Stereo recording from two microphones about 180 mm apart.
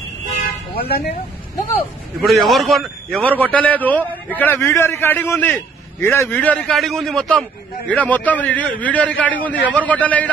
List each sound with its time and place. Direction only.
0.7 s speech: 60° left (ahead or behind)
2.2 s a man's voice: centre (ahead or behind)